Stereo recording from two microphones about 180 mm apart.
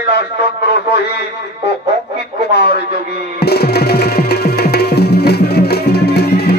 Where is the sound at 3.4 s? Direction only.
65° left (ahead or behind).